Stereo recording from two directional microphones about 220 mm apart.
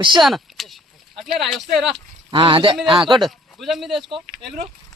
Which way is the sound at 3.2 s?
Centre (ahead or behind).